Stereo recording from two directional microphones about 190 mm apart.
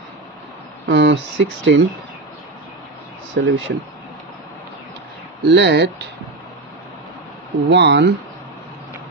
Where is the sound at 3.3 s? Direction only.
80° right.